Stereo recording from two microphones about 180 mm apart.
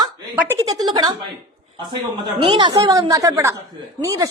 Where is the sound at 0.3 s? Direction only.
15° right (ahead or behind).